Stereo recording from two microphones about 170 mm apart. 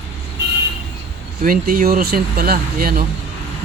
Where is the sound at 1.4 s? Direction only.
55° right (ahead or behind).